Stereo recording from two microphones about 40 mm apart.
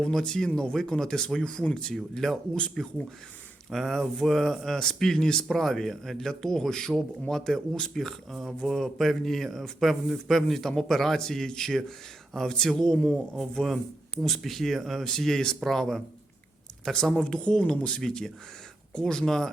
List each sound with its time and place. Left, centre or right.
0.0 s speech: centre
14.2 s speech: centre